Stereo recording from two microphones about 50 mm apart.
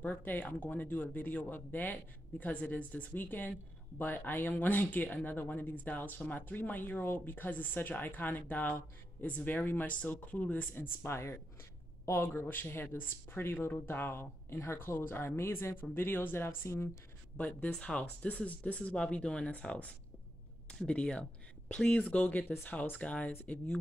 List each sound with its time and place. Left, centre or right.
0.0 s speech: left
9.9 s speech: left
12.4 s speech: left
17.4 s speech: left